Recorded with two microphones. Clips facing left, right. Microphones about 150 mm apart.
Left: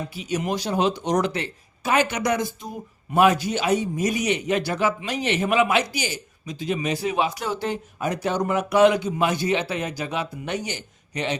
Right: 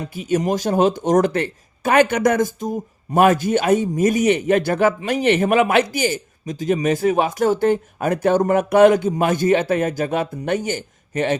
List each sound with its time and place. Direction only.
0.2 s speech: 50° right (ahead or behind)